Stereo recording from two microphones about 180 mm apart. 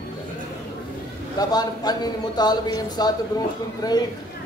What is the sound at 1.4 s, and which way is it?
A man's voice, 20° left (ahead or behind).